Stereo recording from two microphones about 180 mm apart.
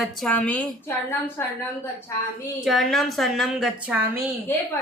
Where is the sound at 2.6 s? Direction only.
Centre (ahead or behind).